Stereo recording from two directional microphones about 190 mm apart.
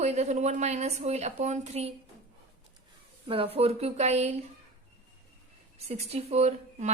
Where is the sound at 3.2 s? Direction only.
30° right (ahead or behind).